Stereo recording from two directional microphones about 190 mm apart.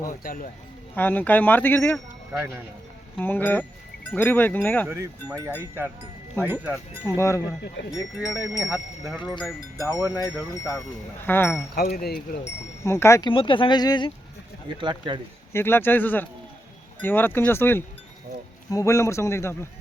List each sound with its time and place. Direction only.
0.1 s speech: 50° left (ahead or behind)
0.9 s speech: 10° left (ahead or behind)
2.3 s speech: 15° right (ahead or behind)
3.2 s speech: 10° left (ahead or behind)
4.9 s speech: 15° right (ahead or behind)
7.2 s speech: 15° left (ahead or behind)
8.6 s speech: 5° right (ahead or behind)
9.8 s speech: 20° left (ahead or behind)
11.7 s speech: 50° left (ahead or behind)
12.8 s speech: 15° left (ahead or behind)
13.3 s speech: 25° left (ahead or behind)
14.8 s speech: 25° right (ahead or behind)
15.5 s speech: 10° left (ahead or behind)